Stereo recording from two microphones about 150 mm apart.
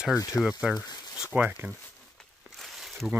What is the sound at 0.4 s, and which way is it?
Speech, 5° right (ahead or behind).